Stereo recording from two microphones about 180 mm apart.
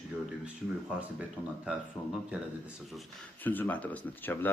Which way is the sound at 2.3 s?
5° right (ahead or behind).